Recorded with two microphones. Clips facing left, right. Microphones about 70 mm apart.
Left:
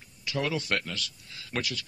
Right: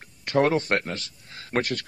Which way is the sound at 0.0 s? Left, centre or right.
Right.